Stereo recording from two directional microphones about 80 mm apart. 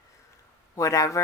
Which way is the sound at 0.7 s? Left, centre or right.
Left.